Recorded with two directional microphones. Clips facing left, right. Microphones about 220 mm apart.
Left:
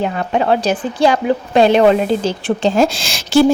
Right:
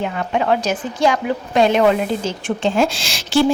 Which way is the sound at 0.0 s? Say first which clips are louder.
Left 3 dB; 35° left (ahead or behind).